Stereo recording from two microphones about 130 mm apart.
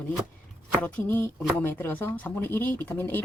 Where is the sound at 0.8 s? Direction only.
15° left (ahead or behind).